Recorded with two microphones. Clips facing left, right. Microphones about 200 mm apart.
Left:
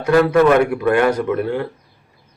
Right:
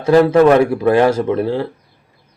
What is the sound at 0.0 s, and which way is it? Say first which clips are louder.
Speech: right 3 dB; 25° right (ahead or behind).